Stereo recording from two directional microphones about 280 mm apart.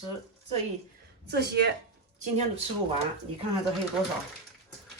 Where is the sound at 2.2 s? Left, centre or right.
Right.